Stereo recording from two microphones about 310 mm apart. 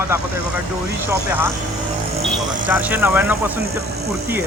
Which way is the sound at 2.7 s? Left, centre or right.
Centre.